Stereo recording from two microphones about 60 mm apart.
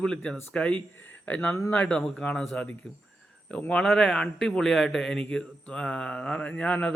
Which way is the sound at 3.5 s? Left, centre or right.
Left.